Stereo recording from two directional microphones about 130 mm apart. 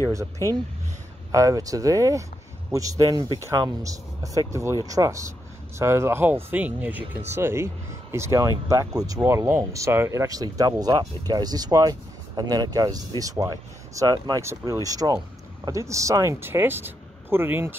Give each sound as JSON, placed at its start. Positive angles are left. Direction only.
{"t": 1.3, "sound": "speech", "side_deg": -25}
{"t": 14.4, "sound": "speech", "side_deg": -20}